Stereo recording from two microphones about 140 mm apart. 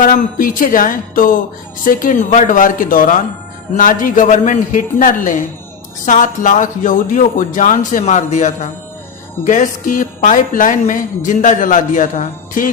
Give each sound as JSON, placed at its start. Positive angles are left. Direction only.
{"t": 0.0, "sound": "speech", "side_deg": 80}